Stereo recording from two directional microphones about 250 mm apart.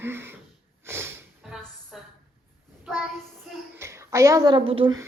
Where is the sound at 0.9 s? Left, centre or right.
Centre.